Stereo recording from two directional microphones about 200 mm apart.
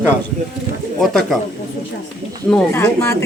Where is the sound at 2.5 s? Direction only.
10° left (ahead or behind).